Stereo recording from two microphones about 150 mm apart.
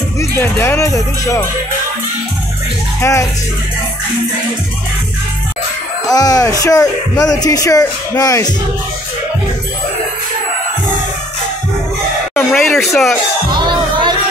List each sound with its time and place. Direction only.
0.4 s speech: 15° left (ahead or behind)
3.0 s speech: 20° left (ahead or behind)
6.0 s speech: 25° left (ahead or behind)
12.4 s a sound: 5° left (ahead or behind)
13.5 s music: 30° right (ahead or behind)